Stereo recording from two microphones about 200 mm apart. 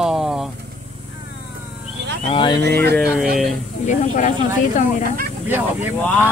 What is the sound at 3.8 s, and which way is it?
Speech, 40° left (ahead or behind).